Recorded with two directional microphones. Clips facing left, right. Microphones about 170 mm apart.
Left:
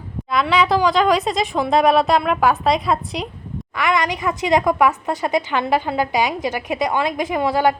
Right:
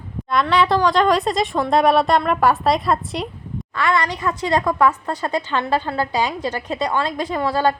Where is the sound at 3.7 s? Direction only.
15° left (ahead or behind).